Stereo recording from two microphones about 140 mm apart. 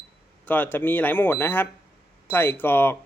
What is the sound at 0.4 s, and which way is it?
A woman's voice, 15° left (ahead or behind).